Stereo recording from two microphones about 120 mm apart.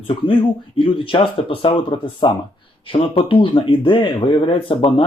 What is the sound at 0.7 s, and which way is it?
Speech, 45° left (ahead or behind).